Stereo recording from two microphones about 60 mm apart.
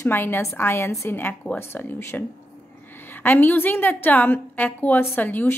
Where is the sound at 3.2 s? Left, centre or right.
Left.